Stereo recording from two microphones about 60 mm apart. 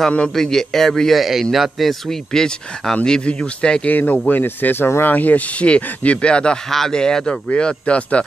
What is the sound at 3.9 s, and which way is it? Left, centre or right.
A man's voice, left.